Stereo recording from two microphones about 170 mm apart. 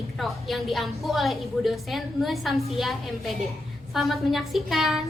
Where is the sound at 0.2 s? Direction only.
Centre (ahead or behind).